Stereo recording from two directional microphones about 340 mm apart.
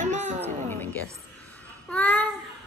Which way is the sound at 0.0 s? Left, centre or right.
Right.